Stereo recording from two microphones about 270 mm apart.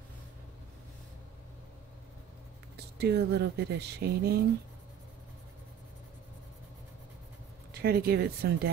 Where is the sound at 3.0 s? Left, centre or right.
Right.